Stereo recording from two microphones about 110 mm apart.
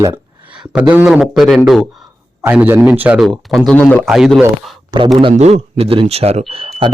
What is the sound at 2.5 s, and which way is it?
Speech, 15° right (ahead or behind).